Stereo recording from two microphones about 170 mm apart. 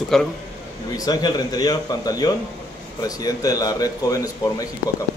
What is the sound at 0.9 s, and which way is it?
A man's voice, 20° left (ahead or behind).